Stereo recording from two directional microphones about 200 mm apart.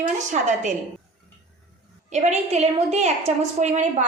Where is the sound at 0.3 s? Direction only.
40° right (ahead or behind).